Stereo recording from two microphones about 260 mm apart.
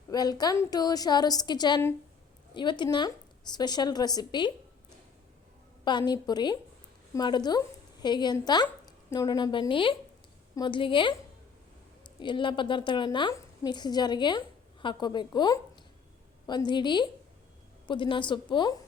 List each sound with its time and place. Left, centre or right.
0.1 s a woman's voice: centre
5.8 s a woman's voice: centre
12.2 s a woman's voice: centre